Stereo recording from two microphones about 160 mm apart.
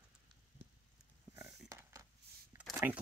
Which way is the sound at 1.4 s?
15° right (ahead or behind).